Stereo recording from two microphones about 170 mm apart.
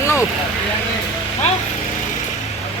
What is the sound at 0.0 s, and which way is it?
Vehicle, 15° left (ahead or behind).